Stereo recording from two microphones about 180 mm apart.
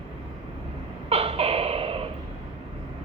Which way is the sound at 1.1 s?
30° right (ahead or behind).